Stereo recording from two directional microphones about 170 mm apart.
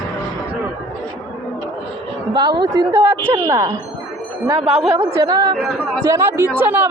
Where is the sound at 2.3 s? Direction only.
25° right (ahead or behind).